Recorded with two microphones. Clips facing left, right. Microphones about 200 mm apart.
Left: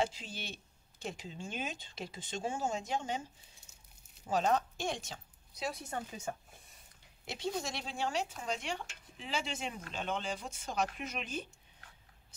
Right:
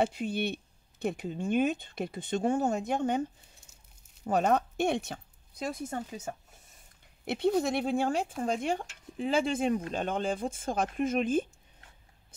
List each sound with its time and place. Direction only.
0.0 s speech: 60° right (ahead or behind)
4.3 s speech: 60° right (ahead or behind); by 6.3 s 45° right (ahead or behind)
7.2 s stir: 60° right (ahead or behind)